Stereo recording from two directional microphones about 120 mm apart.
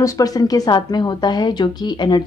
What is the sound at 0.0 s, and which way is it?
A woman's voice, 30° left (ahead or behind).